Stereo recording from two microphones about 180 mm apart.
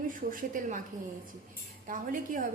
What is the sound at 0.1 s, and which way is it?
Speech, 50° right (ahead or behind).